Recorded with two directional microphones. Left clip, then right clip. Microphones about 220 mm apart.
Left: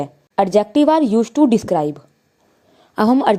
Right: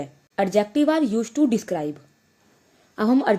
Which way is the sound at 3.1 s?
35° left (ahead or behind).